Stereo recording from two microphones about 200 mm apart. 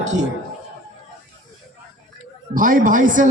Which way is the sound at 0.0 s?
35° right (ahead or behind).